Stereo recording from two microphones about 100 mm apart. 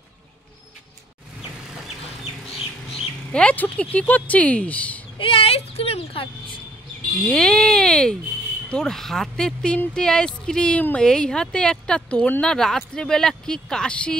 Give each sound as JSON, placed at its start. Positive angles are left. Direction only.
{"t": 3.3, "sound": "speech", "side_deg": 10}
{"t": 5.2, "sound": "a sound", "side_deg": 70}
{"t": 7.2, "sound": "speech", "side_deg": 10}